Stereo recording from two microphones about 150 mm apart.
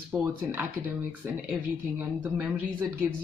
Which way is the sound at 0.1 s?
10° right (ahead or behind).